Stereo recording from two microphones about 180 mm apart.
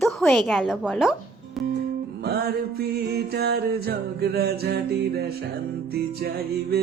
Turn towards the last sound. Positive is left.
turn(degrees=-60)  # may be behind; listen again after turning